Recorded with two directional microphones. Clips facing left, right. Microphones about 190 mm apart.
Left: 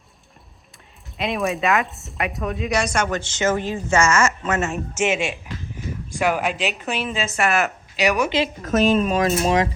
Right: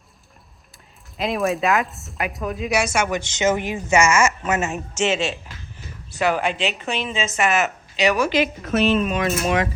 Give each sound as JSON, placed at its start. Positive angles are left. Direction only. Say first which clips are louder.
{"t": 1.1, "sound": "speech", "louder": "right 1 dB", "side_deg": 0}
{"t": 4.9, "sound": "speech", "louder": "right 1 dB", "side_deg": 10}
{"t": 8.0, "sound": "a woman's voice", "louder": "right 1 dB", "side_deg": 20}
{"t": 8.6, "sound": "speech", "louder": "left 4 dB", "side_deg": 45}